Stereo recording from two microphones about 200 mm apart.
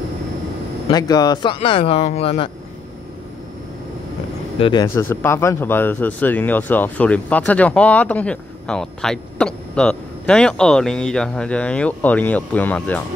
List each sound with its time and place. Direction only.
0.8 s speech: 20° left (ahead or behind)
4.6 s speech: 25° left (ahead or behind); by 13.0 s 5° left (ahead or behind)